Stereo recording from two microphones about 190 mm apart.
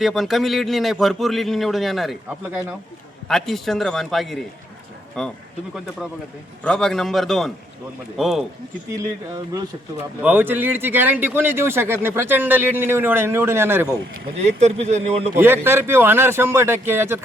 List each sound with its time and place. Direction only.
0.0 s a man's voice: centre (ahead or behind)
6.7 s a man's voice: 5° left (ahead or behind)
8.9 s speech: 15° right (ahead or behind)
14.4 s speech: 35° right (ahead or behind)
15.4 s speech: 10° right (ahead or behind)